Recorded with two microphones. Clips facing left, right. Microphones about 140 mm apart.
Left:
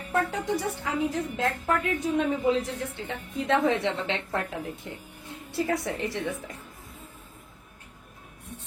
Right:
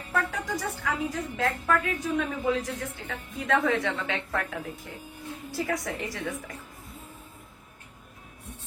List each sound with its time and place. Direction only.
0.1 s a woman's voice: 25° left (ahead or behind)